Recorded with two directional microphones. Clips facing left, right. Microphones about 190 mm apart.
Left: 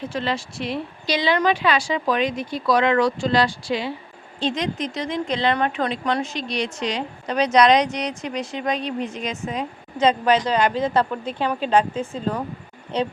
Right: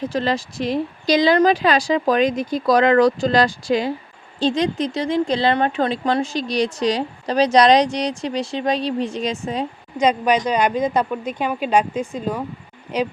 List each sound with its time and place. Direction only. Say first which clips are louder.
0.1 s speech: right 4 dB; 40° right (ahead or behind)
10.0 s speech: right 1 dB; 15° right (ahead or behind)